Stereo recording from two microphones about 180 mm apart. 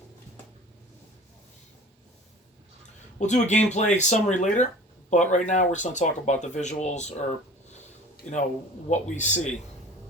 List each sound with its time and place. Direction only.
3.2 s speech: 40° left (ahead or behind)